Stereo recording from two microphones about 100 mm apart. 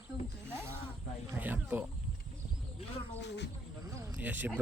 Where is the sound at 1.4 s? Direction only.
15° right (ahead or behind).